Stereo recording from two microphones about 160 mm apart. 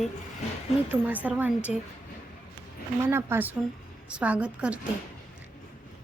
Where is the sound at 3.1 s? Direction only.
15° right (ahead or behind).